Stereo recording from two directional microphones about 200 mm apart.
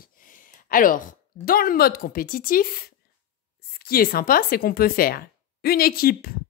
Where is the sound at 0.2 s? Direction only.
45° left (ahead or behind).